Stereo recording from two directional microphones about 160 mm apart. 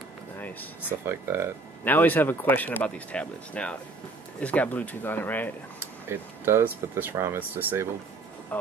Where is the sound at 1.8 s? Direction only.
10° left (ahead or behind).